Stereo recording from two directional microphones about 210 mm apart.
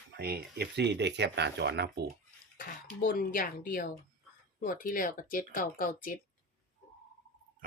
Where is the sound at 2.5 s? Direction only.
40° left (ahead or behind).